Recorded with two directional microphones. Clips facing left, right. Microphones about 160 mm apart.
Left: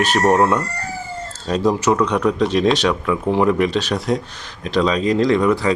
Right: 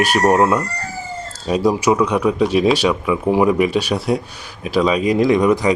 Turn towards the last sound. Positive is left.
turn(degrees=-15)  # may be behind; listen again after turning